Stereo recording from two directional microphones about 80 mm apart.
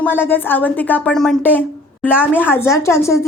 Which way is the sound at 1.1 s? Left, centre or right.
Centre.